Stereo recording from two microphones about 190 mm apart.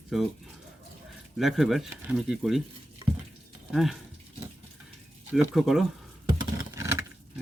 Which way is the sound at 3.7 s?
Centre (ahead or behind).